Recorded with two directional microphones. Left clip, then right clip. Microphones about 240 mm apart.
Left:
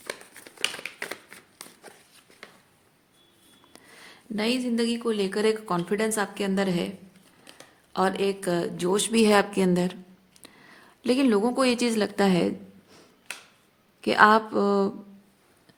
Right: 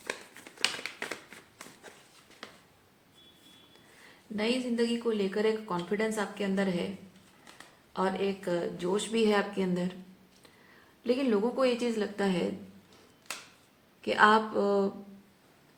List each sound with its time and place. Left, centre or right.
0.9 s a sound: left
3.7 s speech: left
7.9 s a woman's voice: left
11.0 s a woman's voice: left
14.0 s a woman's voice: left